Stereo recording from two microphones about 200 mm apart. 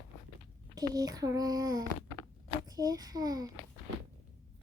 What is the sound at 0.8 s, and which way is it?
Child singing, 20° right (ahead or behind).